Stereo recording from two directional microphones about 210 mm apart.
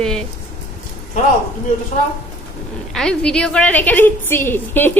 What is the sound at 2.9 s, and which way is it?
A woman's voice, 5° left (ahead or behind).